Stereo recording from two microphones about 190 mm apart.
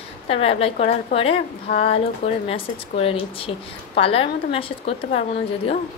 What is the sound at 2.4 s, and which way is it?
A woman's voice, 30° left (ahead or behind).